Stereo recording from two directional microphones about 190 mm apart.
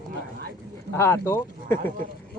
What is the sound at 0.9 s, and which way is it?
Speech, 15° left (ahead or behind).